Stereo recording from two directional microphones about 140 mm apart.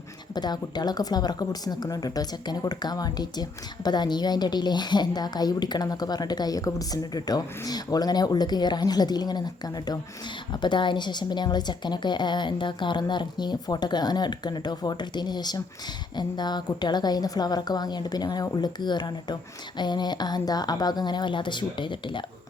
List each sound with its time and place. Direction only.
0.3 s a woman's voice: 30° left (ahead or behind)